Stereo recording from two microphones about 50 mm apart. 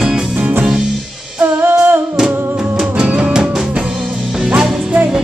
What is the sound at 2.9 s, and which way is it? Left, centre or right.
Music, right.